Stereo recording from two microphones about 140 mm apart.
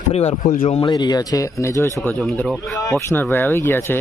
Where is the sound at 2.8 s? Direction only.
25° left (ahead or behind).